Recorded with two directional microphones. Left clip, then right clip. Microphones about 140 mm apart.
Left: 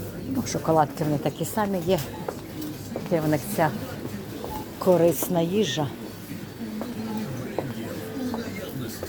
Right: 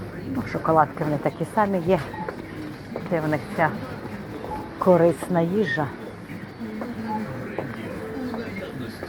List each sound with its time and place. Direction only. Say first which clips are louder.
0.8 s speech: right 2 dB; 35° left (ahead or behind)
1.5 s speech: right 4 dB; 20° left (ahead or behind)
3.1 s a woman's voice: even; 50° left (ahead or behind)
4.8 s speech: right 2 dB; 15° left (ahead or behind)